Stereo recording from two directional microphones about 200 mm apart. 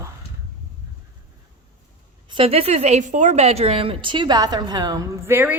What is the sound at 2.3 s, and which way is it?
A woman's voice, 30° right (ahead or behind).